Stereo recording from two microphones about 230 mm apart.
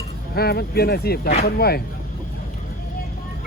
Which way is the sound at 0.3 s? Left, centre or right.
Left.